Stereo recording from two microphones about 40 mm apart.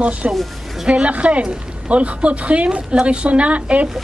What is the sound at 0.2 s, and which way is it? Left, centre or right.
A woman's voice, right.